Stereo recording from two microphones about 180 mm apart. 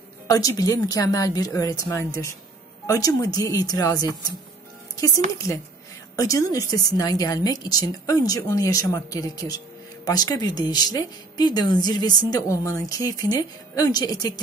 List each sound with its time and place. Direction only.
0.3 s a woman's voice: 20° left (ahead or behind)
6.1 s a woman's voice: 20° left (ahead or behind)